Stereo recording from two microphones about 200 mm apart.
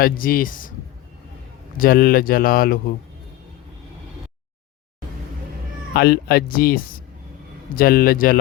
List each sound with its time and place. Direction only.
0.0 s speech: 45° left (ahead or behind)
1.8 s speech: 45° left (ahead or behind)
5.9 s speech: 50° left (ahead or behind)
7.8 s speech: 45° left (ahead or behind)